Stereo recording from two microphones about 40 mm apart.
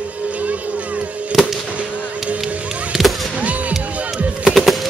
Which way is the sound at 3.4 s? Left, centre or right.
Right.